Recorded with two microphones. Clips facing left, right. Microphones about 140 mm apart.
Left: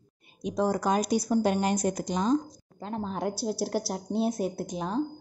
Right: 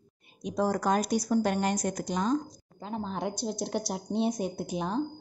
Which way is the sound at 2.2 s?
Centre (ahead or behind).